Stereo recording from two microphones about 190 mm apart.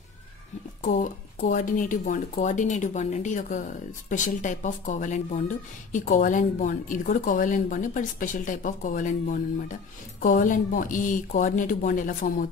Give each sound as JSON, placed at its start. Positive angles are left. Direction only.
{"t": 1.4, "sound": "speech", "side_deg": 45}